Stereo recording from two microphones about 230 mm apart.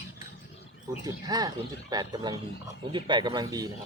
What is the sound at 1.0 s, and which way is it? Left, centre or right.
A man's voice, centre.